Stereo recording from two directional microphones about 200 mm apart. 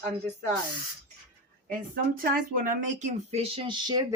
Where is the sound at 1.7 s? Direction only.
45° right (ahead or behind).